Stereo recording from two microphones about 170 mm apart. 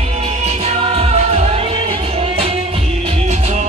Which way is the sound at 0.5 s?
40° right (ahead or behind).